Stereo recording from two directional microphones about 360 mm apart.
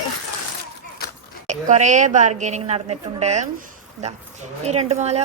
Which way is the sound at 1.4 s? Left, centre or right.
Centre.